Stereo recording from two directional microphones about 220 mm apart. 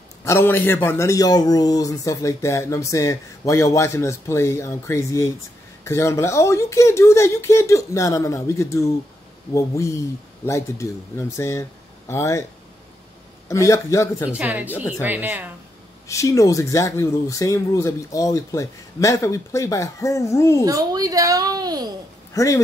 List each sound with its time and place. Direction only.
0.2 s a man's voice: 10° left (ahead or behind)
13.5 s a man's voice: 15° left (ahead or behind)
14.3 s a woman's voice: 5° right (ahead or behind)
16.1 s a man's voice: 15° left (ahead or behind)
20.6 s a woman's voice: 15° right (ahead or behind)
22.3 s speech: 15° left (ahead or behind)